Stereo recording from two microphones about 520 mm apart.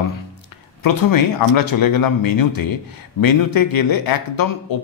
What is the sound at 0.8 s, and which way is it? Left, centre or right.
Speech, left.